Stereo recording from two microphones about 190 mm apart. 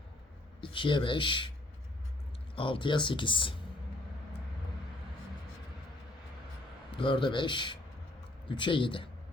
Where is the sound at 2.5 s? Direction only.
25° left (ahead or behind).